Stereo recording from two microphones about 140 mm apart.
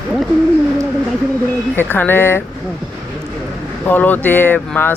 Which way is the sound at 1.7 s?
15° left (ahead or behind).